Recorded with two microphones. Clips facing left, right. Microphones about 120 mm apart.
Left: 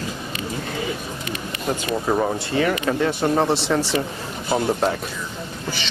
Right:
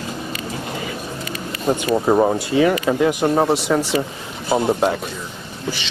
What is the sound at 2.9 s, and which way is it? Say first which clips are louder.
Speech: right 3 dB; 10° right (ahead or behind).